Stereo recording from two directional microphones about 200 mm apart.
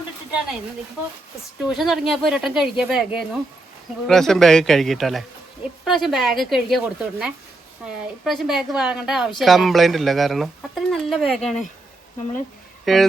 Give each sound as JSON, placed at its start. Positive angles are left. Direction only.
{"t": 1.6, "sound": "speech", "side_deg": 0}
{"t": 12.8, "sound": "speech", "side_deg": 0}